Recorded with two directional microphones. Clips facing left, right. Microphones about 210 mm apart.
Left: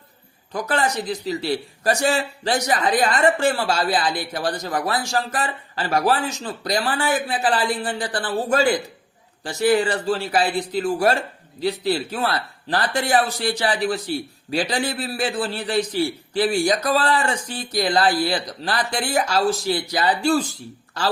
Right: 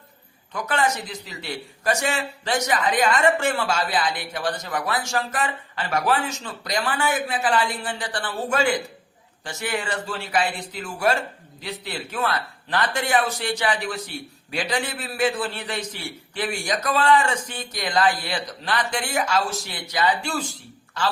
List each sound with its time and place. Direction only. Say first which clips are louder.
0.5 s a man's voice: left 2 dB; 35° left (ahead or behind)